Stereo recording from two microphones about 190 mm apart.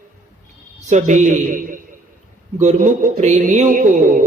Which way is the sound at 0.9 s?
40° right (ahead or behind).